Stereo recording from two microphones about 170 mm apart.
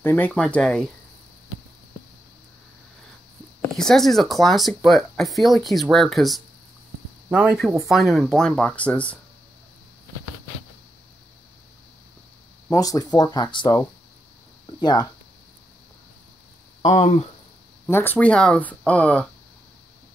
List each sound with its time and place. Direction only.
0.0 s speech: 10° left (ahead or behind)
3.7 s speech: centre (ahead or behind)
12.6 s speech: 20° left (ahead or behind)
16.8 s speech: 45° left (ahead or behind)
17.8 s speech: 10° left (ahead or behind)